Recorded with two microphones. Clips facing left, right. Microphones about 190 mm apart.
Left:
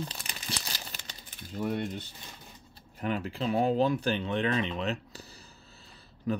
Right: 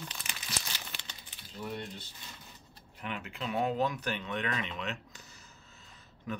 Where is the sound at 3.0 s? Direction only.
35° left (ahead or behind).